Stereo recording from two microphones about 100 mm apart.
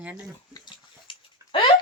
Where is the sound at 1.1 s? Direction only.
60° left (ahead or behind).